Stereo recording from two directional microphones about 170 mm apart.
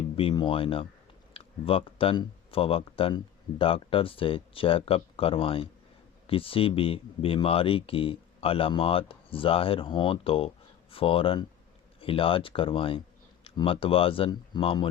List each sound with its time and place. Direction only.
0.2 s speech: 30° left (ahead or behind)